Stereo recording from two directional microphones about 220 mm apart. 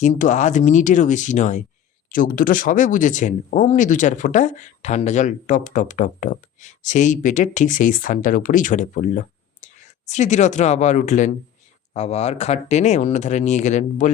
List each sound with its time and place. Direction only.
0.0 s speech: 35° left (ahead or behind)